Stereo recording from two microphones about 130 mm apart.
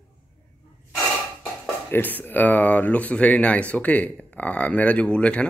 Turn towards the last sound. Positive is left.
turn(degrees=10)  # may be behind; listen again after turning